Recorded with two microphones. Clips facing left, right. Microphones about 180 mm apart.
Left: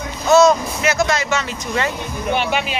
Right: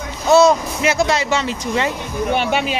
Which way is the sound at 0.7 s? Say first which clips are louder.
Right 1 dB; 30° right (ahead or behind).